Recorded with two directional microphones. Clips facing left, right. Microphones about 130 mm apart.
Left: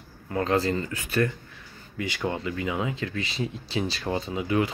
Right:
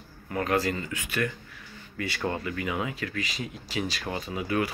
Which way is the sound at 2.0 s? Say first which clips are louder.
Left 1 dB; 20° left (ahead or behind).